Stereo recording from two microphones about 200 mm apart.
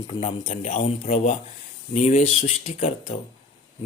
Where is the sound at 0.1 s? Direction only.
30° left (ahead or behind).